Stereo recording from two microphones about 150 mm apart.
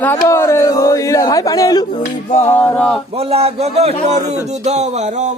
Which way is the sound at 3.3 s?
45° right (ahead or behind).